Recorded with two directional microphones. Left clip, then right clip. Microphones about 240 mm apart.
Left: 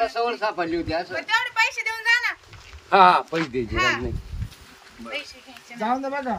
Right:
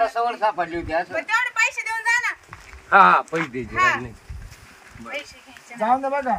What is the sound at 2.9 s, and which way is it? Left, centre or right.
Speech, left.